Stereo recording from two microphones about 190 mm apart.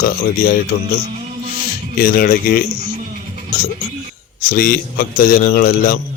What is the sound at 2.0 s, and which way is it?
Speech, 50° left (ahead or behind).